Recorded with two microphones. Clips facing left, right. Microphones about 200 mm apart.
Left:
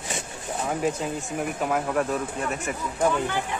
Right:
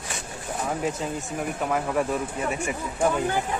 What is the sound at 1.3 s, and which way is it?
Speech, centre (ahead or behind).